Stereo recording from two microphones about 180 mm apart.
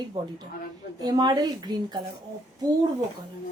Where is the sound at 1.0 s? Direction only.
25° right (ahead or behind).